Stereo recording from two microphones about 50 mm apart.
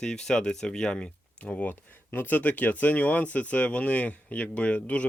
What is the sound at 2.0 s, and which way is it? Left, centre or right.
Speech, left.